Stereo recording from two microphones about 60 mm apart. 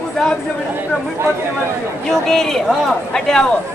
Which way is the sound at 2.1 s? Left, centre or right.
Centre.